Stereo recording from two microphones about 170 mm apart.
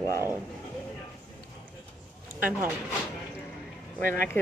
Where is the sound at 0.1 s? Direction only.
15° right (ahead or behind).